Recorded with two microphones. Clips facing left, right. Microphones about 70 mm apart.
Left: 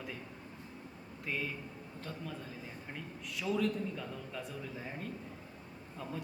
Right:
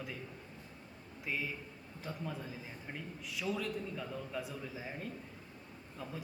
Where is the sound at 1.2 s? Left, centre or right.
Centre.